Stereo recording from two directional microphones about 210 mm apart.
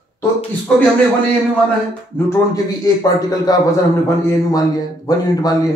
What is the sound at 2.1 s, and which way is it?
A man's voice, 15° left (ahead or behind).